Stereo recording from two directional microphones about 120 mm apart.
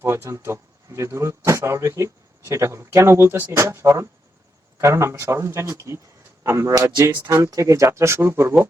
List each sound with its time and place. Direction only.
0.0 s speech: 20° right (ahead or behind)